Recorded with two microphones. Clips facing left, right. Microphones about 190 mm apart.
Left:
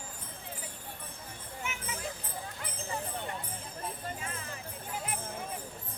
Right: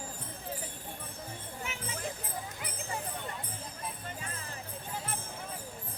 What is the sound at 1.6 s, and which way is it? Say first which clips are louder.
Music: left 3 dB; 35° right (ahead or behind).